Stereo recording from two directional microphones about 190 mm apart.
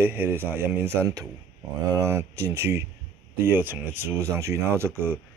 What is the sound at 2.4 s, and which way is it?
Speech, 15° right (ahead or behind).